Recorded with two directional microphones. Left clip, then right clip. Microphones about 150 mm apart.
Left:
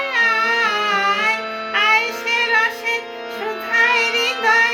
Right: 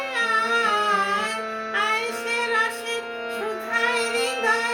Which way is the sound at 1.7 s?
10° right (ahead or behind).